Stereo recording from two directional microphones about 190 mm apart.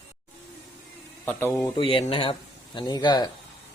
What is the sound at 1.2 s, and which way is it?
Speech, 10° left (ahead or behind).